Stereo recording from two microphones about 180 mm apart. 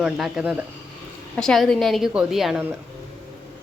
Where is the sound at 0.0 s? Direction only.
5° right (ahead or behind).